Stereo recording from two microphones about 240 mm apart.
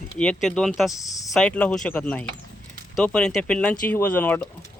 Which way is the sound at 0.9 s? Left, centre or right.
Centre.